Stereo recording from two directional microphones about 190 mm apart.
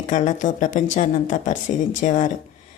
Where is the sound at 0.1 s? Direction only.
40° left (ahead or behind).